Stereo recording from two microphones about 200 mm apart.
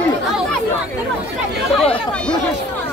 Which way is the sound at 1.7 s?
5° left (ahead or behind).